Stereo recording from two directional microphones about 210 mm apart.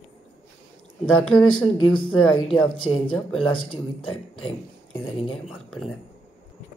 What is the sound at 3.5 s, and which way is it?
Speech, 25° left (ahead or behind).